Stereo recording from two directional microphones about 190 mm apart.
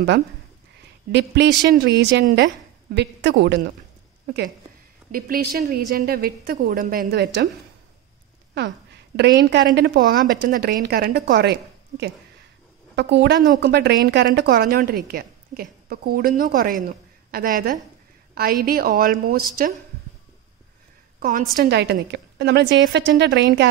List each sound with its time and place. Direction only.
1.1 s a woman's voice: 65° right (ahead or behind)
5.1 s a woman's voice: 50° right (ahead or behind)
8.5 s a woman's voice: 65° right (ahead or behind)
21.2 s a woman's voice: 50° right (ahead or behind); by 23.7 s 65° right (ahead or behind)